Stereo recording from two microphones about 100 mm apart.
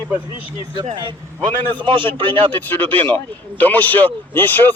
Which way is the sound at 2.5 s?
20° left (ahead or behind).